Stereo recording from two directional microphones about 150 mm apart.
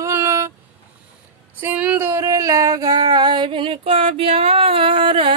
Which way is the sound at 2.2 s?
20° right (ahead or behind).